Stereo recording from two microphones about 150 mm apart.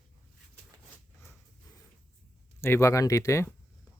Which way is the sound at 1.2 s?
15° left (ahead or behind).